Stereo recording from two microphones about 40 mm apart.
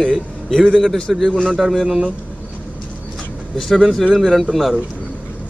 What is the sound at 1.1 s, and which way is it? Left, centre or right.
Speech, centre.